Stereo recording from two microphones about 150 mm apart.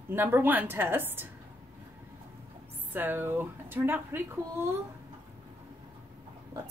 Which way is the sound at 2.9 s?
15° right (ahead or behind).